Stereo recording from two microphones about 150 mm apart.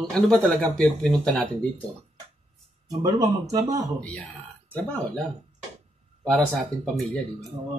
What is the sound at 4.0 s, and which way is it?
Speech, 10° left (ahead or behind).